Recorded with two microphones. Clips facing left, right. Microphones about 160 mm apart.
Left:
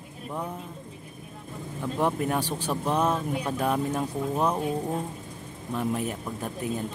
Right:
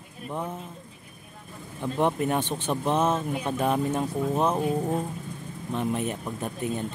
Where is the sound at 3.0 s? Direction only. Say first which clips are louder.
Right 1 dB; 20° right (ahead or behind).